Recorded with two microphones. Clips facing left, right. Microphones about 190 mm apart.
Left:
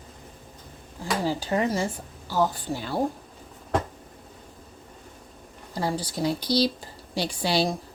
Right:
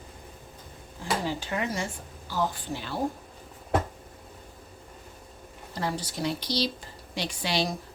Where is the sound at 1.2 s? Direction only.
35° left (ahead or behind).